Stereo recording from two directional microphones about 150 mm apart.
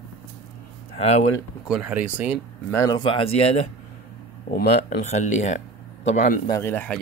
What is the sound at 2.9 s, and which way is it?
Speech, 35° left (ahead or behind).